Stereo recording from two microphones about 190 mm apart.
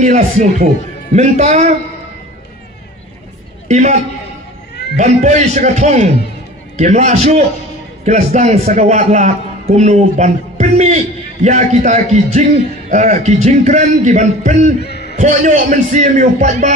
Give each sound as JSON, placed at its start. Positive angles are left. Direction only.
{"t": 0.0, "sound": "a man's voice", "side_deg": -40}
{"t": 3.6, "sound": "a man's voice", "side_deg": -40}
{"t": 14.9, "sound": "a sound", "side_deg": 60}
{"t": 15.1, "sound": "a man's voice", "side_deg": -40}